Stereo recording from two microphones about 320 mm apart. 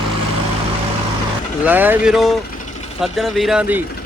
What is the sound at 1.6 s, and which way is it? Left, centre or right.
Speech, centre.